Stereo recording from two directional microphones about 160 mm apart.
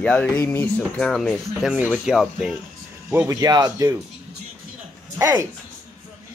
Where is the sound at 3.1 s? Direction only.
20° right (ahead or behind).